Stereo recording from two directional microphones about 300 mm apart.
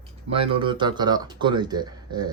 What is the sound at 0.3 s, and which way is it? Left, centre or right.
A man's voice, centre.